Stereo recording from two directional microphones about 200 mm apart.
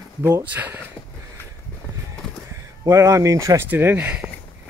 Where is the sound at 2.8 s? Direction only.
15° right (ahead or behind).